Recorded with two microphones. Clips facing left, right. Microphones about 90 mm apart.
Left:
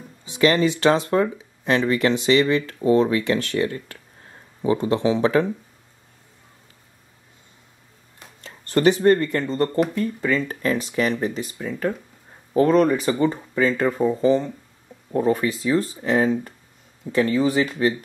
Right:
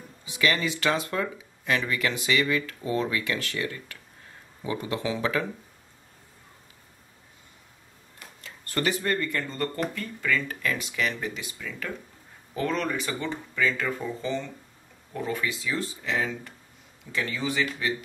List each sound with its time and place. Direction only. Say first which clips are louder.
0.2 s speech: left 8 dB; 35° left (ahead or behind)
8.2 s speech: left 3 dB; 30° left (ahead or behind)